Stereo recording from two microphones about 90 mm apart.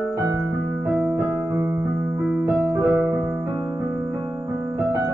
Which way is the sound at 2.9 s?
30° right (ahead or behind).